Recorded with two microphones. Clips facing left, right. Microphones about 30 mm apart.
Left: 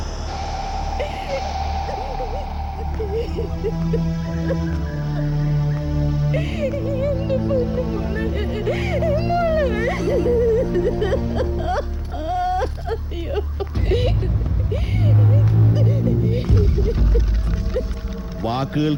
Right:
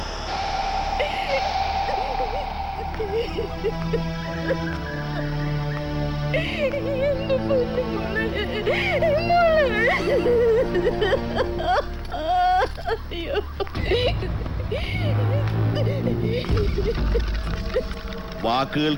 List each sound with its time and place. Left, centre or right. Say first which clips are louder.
0.3 s owl: right 3 dB; right
3.0 s speech: left 1 dB; right
5.1 s music: left 6 dB; right
14.7 s a sound: left 3 dB; right
18.4 s speech: even; right